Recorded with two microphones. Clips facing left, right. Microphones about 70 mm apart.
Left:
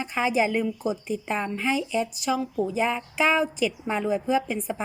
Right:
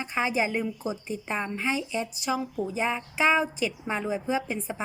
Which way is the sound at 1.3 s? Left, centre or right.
Centre.